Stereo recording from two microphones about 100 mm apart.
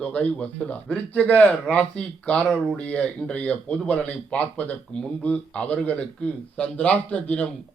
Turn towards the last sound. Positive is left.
turn(degrees=10)  # may be behind; listen again after turning